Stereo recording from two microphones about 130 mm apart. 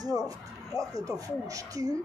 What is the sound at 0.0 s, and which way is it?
Speech, 30° right (ahead or behind).